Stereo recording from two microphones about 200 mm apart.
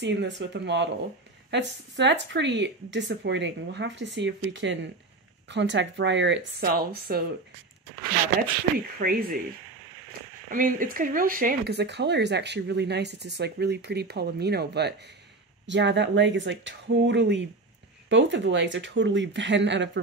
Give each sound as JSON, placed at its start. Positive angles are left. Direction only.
{"t": 0.0, "sound": "speech", "side_deg": -60}
{"t": 8.7, "sound": "speech", "side_deg": -50}
{"t": 10.5, "sound": "speech", "side_deg": -45}